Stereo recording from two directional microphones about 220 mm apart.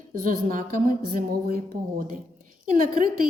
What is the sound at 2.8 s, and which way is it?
Speech, 40° right (ahead or behind).